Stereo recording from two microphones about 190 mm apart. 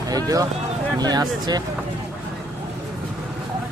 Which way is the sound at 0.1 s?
20° right (ahead or behind).